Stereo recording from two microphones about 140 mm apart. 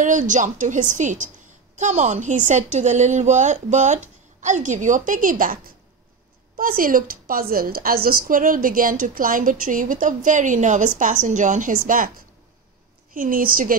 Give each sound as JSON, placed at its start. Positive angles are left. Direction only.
{"t": 0.0, "sound": "a woman's voice", "side_deg": -65}
{"t": 6.5, "sound": "a woman's voice", "side_deg": -85}
{"t": 13.1, "sound": "a woman's voice", "side_deg": -80}